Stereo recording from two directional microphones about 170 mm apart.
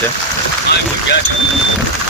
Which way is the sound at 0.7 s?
75° left (ahead or behind).